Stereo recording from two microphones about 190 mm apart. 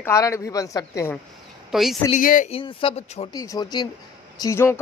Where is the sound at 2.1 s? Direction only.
45° left (ahead or behind).